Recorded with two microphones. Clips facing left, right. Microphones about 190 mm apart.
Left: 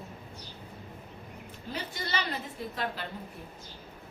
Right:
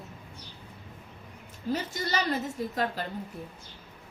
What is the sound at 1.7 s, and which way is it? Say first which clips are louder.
A woman's voice: right 4 dB; 45° right (ahead or behind).